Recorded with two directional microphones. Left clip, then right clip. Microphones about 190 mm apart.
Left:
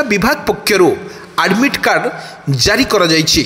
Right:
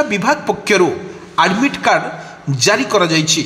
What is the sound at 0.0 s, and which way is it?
A man's voice, 20° left (ahead or behind).